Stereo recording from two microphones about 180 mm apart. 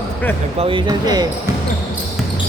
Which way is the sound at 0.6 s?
30° right (ahead or behind).